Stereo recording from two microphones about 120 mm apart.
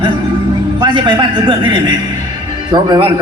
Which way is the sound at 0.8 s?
40° right (ahead or behind).